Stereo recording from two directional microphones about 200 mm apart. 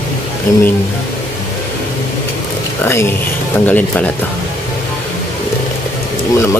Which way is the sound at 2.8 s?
10° left (ahead or behind).